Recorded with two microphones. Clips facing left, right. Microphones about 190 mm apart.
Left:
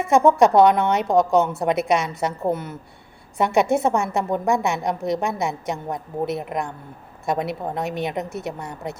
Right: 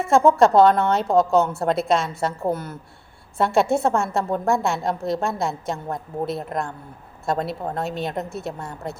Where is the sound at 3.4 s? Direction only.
20° left (ahead or behind).